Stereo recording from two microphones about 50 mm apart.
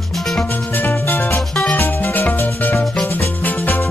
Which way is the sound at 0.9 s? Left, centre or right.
Left.